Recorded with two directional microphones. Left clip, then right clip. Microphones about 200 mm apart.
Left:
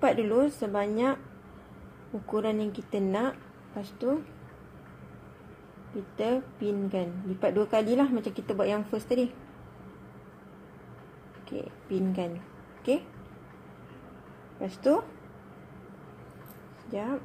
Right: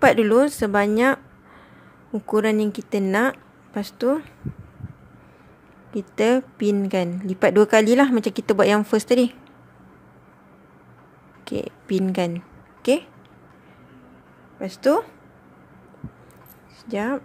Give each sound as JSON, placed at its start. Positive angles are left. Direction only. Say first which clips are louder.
{"t": 0.0, "sound": "a woman's voice", "louder": "right 9 dB", "side_deg": -45}
{"t": 2.3, "sound": "a woman's voice", "louder": "right 9 dB", "side_deg": -40}
{"t": 6.1, "sound": "a woman's voice", "louder": "right 10 dB", "side_deg": -50}
{"t": 11.4, "sound": "speech", "louder": "right 9 dB", "side_deg": -45}
{"t": 14.6, "sound": "a woman's voice", "louder": "right 6 dB", "side_deg": -40}
{"t": 16.9, "sound": "a woman's voice", "louder": "right 8 dB", "side_deg": -45}